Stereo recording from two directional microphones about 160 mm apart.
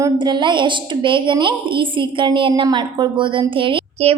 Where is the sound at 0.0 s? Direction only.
30° right (ahead or behind).